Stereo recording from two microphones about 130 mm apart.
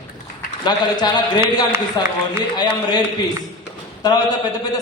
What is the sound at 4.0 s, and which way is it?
Speech, 30° left (ahead or behind).